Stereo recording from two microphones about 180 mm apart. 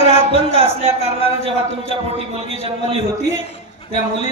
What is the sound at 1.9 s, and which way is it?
A man's voice, 30° right (ahead or behind).